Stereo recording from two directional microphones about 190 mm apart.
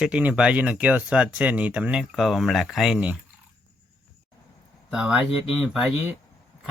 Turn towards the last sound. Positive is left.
turn(degrees=0)  # may be behind; listen again after turning